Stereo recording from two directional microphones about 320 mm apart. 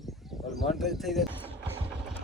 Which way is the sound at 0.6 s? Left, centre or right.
Centre.